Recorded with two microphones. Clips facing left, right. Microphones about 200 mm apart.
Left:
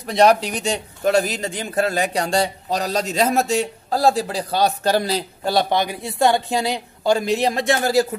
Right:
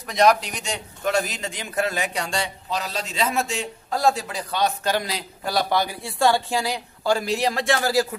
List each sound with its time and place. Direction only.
0.0 s a man's voice: 30° left (ahead or behind)